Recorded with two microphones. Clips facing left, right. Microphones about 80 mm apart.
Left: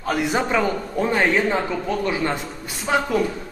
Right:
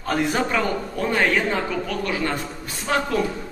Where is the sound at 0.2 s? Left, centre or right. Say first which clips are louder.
Left 2 dB; centre.